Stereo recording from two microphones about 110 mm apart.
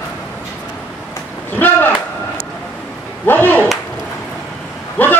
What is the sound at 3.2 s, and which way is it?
Clapping, 15° left (ahead or behind).